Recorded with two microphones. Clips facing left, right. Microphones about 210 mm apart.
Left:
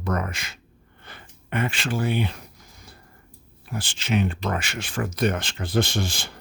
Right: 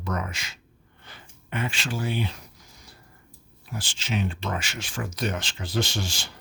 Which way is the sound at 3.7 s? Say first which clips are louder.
Left 5 dB; 60° left (ahead or behind).